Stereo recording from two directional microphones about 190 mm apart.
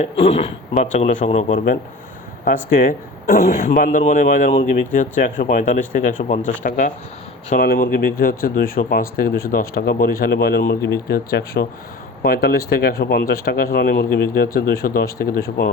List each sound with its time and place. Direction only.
0.0 s speech: 35° left (ahead or behind); by 15.4 s 50° left (ahead or behind)